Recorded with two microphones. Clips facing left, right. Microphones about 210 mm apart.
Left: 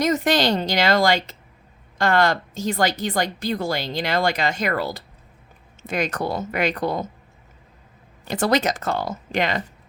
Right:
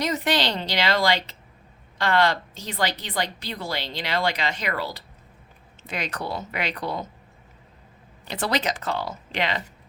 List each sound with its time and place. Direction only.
0.0 s a woman's voice: 45° left (ahead or behind)
8.3 s a woman's voice: 45° left (ahead or behind)